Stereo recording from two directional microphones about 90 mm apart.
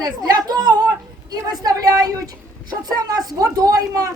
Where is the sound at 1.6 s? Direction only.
45° right (ahead or behind).